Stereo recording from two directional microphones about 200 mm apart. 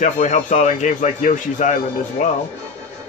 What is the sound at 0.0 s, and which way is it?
Speech, 40° left (ahead or behind).